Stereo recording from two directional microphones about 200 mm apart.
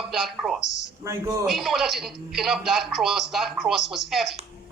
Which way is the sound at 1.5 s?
Centre (ahead or behind).